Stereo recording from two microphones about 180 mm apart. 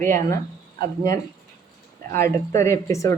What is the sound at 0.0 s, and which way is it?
Speech, 50° right (ahead or behind).